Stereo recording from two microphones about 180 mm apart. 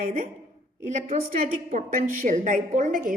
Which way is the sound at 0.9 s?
45° right (ahead or behind).